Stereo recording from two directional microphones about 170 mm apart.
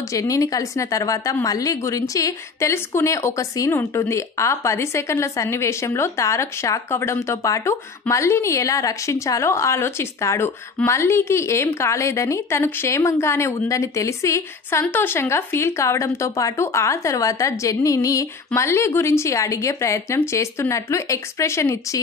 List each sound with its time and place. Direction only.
0.1 s a woman's voice: 20° left (ahead or behind)